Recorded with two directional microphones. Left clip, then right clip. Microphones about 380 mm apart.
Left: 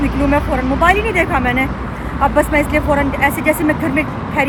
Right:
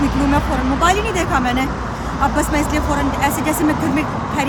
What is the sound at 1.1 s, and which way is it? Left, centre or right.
Speech, centre.